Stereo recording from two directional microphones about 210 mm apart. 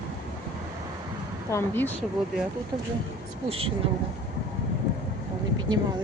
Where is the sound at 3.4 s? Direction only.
25° right (ahead or behind).